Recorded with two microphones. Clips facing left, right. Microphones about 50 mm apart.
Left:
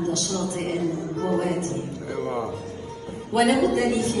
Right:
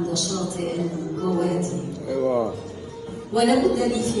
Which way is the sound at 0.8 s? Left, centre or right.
Left.